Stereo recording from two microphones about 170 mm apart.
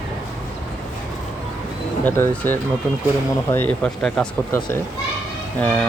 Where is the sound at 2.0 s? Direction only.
10° left (ahead or behind).